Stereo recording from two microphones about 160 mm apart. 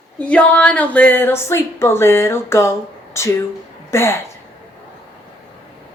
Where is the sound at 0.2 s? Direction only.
10° left (ahead or behind).